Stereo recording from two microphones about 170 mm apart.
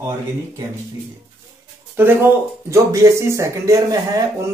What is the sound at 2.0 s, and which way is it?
Speech, 10° right (ahead or behind).